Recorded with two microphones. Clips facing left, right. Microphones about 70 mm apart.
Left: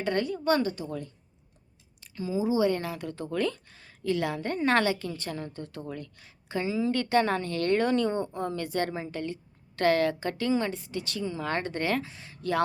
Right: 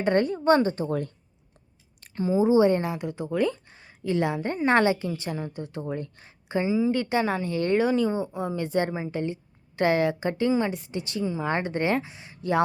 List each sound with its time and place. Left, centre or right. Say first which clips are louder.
0.0 s a woman's voice: right 5 dB; right
0.9 s speech: right 8 dB; right; by 12.6 s centre